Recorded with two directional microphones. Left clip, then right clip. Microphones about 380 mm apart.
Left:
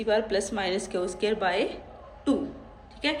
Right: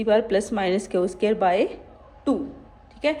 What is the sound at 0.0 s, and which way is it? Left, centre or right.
A woman's voice, centre.